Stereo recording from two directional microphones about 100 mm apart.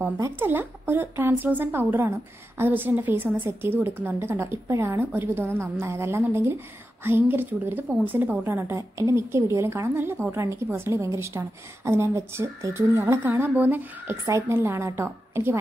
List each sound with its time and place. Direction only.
0.2 s a woman's voice: 20° right (ahead or behind)